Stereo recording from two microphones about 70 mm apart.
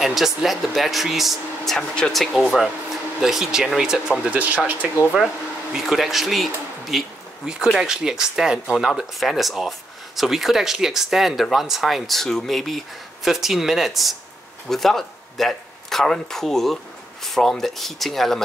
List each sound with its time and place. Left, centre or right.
0.0 s speech: centre
4.2 s speech: right
5.7 s speech: centre